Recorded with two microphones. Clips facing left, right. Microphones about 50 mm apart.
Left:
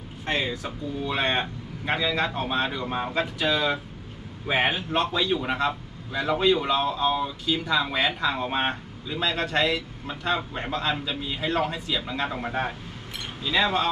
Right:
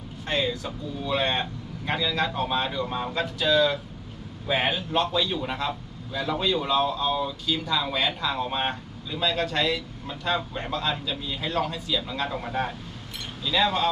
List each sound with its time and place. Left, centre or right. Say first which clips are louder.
0.3 s speech: even; left